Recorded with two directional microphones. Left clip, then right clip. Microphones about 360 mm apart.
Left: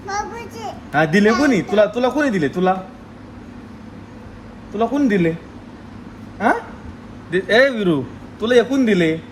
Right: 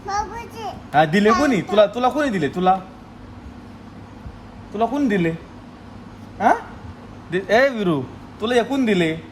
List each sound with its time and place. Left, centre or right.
0.2 s a sound: centre
0.9 s a man's voice: right
4.8 s a man's voice: centre
7.3 s a man's voice: centre